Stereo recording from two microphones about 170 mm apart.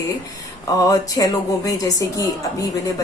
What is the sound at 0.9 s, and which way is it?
A woman's voice, 20° left (ahead or behind).